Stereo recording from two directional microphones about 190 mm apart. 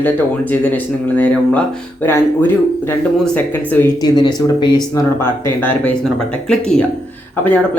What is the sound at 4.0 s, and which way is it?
Speech, 20° left (ahead or behind).